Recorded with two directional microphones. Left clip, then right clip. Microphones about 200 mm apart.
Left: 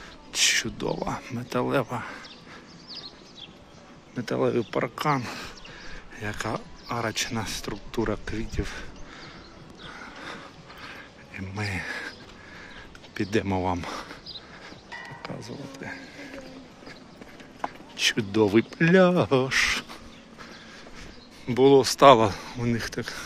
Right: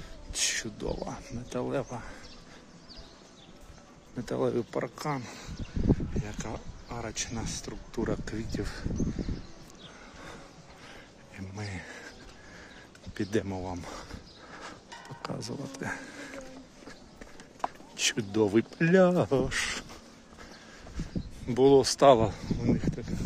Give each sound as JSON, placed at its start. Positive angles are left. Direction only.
{"t": 0.3, "sound": "speech", "side_deg": -10}
{"t": 4.1, "sound": "speech", "side_deg": -15}
{"t": 10.2, "sound": "a sound", "side_deg": -10}
{"t": 13.1, "sound": "speech", "side_deg": -15}
{"t": 13.5, "sound": "speech", "side_deg": 0}
{"t": 13.8, "sound": "a sound", "side_deg": -15}
{"t": 15.2, "sound": "speech", "side_deg": -30}
{"t": 17.9, "sound": "speech", "side_deg": -15}
{"t": 21.5, "sound": "speech", "side_deg": -20}